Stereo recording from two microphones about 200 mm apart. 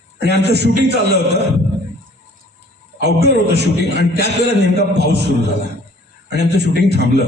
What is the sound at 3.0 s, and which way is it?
A man's voice, 55° right (ahead or behind).